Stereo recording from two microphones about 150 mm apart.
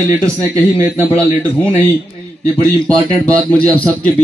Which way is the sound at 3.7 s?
10° left (ahead or behind).